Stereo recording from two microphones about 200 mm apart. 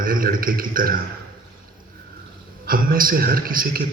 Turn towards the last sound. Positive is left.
turn(degrees=-45)  # may be behind; listen again after turning